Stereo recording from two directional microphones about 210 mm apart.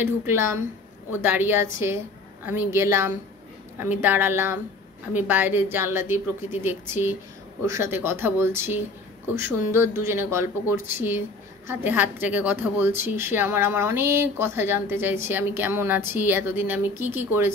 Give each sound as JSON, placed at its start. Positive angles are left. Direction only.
{"t": 0.0, "sound": "speech", "side_deg": -10}